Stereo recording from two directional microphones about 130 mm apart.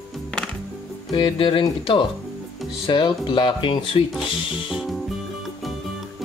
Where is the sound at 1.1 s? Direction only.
40° left (ahead or behind).